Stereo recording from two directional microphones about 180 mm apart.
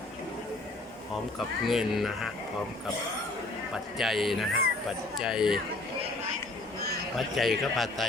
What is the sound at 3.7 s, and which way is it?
A man's voice, centre (ahead or behind).